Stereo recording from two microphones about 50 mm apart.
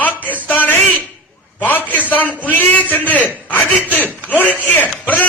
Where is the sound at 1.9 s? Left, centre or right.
Left.